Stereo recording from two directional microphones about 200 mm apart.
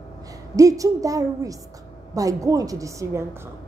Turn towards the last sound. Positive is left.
turn(degrees=-15)  # may be behind; listen again after turning